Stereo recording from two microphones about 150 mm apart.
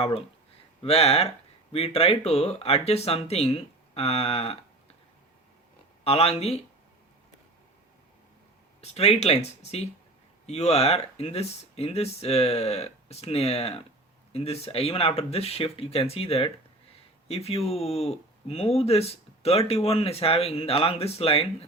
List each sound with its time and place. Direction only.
0.8 s speech: 40° left (ahead or behind)
6.1 s speech: 40° left (ahead or behind)
8.8 s speech: 45° left (ahead or behind)